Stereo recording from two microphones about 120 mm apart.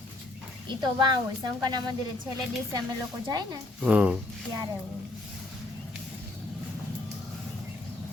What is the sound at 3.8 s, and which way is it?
Speech, 10° right (ahead or behind).